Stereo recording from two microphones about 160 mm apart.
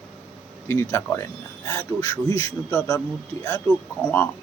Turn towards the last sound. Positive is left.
turn(degrees=10)  # may be behind; listen again after turning